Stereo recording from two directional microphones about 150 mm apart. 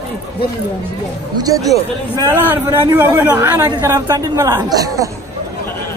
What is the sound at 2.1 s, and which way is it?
A man's voice, 15° right (ahead or behind).